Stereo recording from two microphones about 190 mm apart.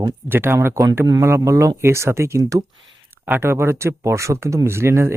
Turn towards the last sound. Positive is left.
turn(degrees=-15)  # may be behind; listen again after turning